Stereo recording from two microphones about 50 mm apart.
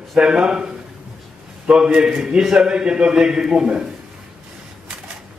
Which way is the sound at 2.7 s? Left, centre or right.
Centre.